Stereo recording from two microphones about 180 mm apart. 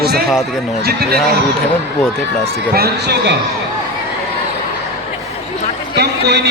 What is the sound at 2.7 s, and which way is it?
Speech, 65° right (ahead or behind).